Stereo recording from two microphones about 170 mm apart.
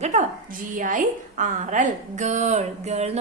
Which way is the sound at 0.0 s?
45° right (ahead or behind).